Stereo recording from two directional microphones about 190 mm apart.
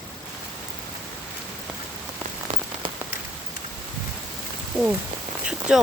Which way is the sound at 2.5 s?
35° right (ahead or behind).